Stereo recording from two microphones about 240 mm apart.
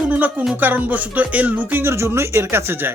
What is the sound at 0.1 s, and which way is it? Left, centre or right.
Speech, centre.